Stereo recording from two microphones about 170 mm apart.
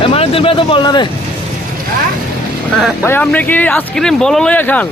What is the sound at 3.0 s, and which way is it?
Speech, 10° left (ahead or behind).